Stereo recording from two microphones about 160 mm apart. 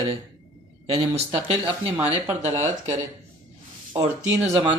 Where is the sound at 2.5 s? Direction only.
40° right (ahead or behind).